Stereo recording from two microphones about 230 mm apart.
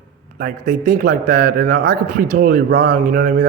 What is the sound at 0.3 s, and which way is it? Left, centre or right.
A man's voice, right.